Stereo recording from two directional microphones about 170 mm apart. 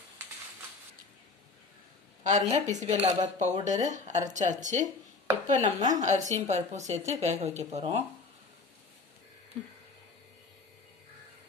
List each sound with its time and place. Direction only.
2.2 s speech: 45° right (ahead or behind)